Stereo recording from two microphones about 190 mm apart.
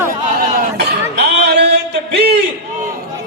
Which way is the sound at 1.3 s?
60° right (ahead or behind).